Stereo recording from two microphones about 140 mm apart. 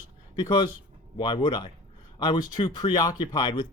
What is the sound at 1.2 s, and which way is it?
Speech, 35° left (ahead or behind).